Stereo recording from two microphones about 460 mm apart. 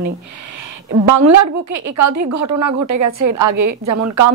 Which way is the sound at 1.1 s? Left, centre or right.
Right.